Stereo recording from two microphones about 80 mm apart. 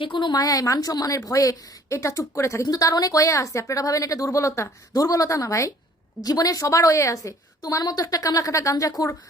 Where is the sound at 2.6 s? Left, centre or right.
Left.